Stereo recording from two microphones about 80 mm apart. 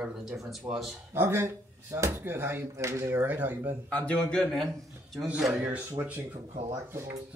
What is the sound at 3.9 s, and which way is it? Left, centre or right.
A man's voice, centre.